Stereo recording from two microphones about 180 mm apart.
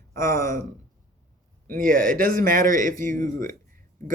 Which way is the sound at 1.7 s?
45° right (ahead or behind).